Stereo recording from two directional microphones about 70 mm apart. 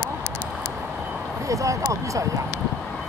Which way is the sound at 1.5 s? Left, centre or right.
Right.